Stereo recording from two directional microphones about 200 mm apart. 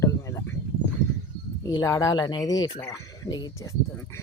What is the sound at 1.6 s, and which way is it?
Speech, 20° left (ahead or behind).